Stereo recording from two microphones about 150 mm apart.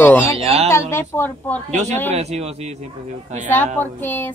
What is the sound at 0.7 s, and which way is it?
Speech, 15° left (ahead or behind).